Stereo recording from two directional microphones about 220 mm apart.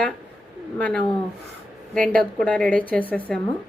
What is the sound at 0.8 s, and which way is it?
A woman's voice, 5° left (ahead or behind).